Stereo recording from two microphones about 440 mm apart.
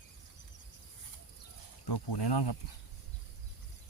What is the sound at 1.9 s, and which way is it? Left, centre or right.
Speech, left.